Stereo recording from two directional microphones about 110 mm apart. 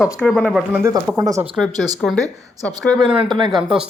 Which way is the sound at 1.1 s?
35° right (ahead or behind).